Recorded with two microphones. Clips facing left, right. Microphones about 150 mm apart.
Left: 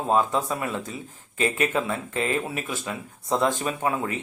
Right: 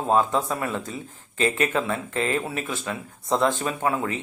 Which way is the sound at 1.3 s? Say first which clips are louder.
Right 1 dB; 30° right (ahead or behind).